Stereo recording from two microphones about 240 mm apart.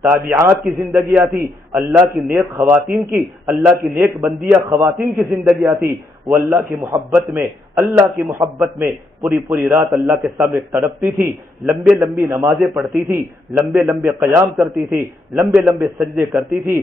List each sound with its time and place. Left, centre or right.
0.0 s a man's voice: centre
14.0 s a man's voice: centre